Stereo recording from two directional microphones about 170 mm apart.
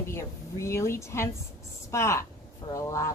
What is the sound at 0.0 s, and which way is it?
A woman's voice, 15° left (ahead or behind).